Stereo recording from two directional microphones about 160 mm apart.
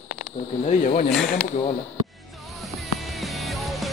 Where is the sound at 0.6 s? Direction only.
50° left (ahead or behind).